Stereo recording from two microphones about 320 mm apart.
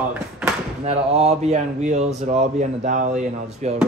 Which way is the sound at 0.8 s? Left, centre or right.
Centre.